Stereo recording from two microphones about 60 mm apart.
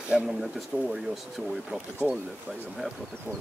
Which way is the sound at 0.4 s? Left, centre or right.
Centre.